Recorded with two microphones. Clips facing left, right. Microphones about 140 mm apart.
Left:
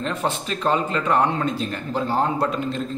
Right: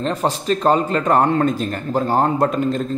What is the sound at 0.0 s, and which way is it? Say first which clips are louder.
A man's voice: right 4 dB; 35° right (ahead or behind).